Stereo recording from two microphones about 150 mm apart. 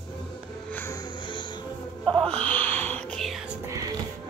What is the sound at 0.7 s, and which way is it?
Music, 15° left (ahead or behind).